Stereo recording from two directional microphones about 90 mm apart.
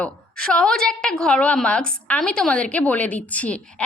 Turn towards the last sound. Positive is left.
turn(degrees=15)  # may be behind; listen again after turning